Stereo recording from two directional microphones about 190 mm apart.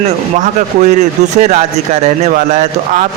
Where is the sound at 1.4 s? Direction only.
35° right (ahead or behind).